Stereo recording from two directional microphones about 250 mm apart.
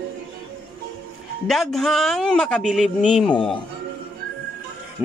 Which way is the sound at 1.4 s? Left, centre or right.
Centre.